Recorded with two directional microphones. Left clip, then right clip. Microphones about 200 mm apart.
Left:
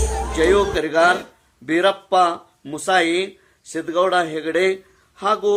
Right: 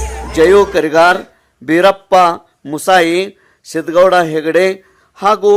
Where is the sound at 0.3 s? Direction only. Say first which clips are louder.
Right 9 dB; 40° right (ahead or behind).